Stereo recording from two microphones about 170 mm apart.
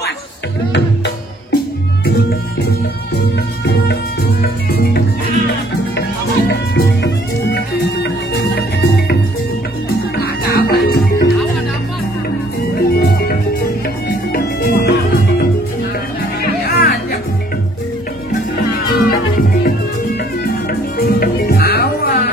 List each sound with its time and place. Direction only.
0.7 s music: 80° left
3.2 s music: 80° left
5.9 s music: 85° left; by 11.3 s 60° left (ahead or behind)
12.9 s music: 65° left (ahead or behind)
16.4 s music: 70° left (ahead or behind)
18.6 s music: 60° left (ahead or behind)
21.0 s music: 65° left (ahead or behind)